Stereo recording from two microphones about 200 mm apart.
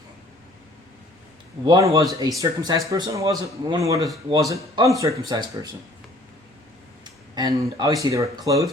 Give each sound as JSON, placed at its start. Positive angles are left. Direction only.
{"t": 1.6, "sound": "a man's voice", "side_deg": -15}
{"t": 7.0, "sound": "speech", "side_deg": -20}